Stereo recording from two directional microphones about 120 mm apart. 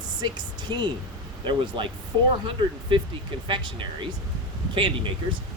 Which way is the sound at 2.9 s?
45° right (ahead or behind).